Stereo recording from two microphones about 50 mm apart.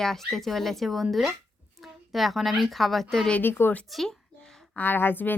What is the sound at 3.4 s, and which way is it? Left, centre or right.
Speech, left.